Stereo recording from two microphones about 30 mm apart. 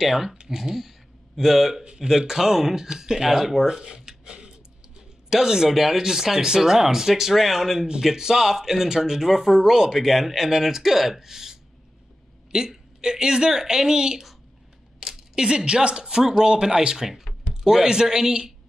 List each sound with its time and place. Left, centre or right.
0.0 s speech: centre
3.6 s a sound: right
4.3 s music: right
5.3 s speech: right
15.0 s a sound: centre
15.4 s a woman's voice: right
16.0 s speech: centre
17.1 s a sound: centre
17.6 s speech: right